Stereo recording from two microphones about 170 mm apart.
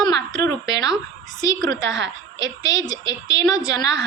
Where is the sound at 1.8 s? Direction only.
90° right.